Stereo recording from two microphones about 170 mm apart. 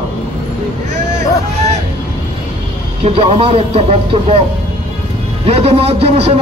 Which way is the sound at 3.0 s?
35° right (ahead or behind).